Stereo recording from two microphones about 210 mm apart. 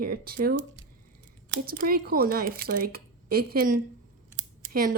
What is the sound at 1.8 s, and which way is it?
Speech, 45° right (ahead or behind).